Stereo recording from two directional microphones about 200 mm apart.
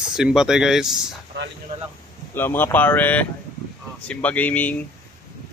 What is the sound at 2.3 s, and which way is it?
Speech, 10° left (ahead or behind).